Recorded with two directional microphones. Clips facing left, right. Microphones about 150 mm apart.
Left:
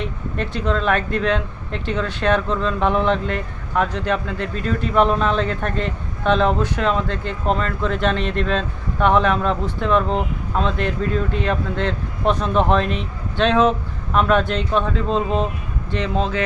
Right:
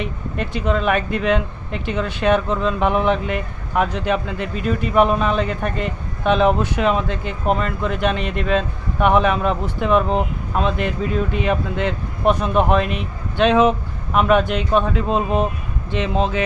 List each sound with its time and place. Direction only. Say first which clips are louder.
0.0 s speech: even; 15° right (ahead or behind)